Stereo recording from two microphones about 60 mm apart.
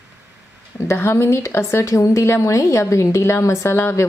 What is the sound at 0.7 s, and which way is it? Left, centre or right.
A woman's voice, left.